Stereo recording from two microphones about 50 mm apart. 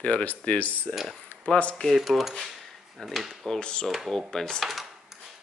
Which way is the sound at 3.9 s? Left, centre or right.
Centre.